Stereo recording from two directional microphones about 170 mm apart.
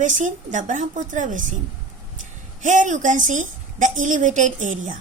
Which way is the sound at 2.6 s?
45° right (ahead or behind).